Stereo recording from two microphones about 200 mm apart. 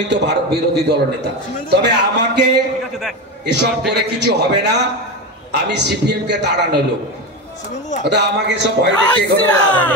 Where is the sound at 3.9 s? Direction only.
55° right (ahead or behind).